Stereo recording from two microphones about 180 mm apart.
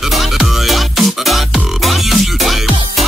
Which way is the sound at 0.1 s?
Centre (ahead or behind).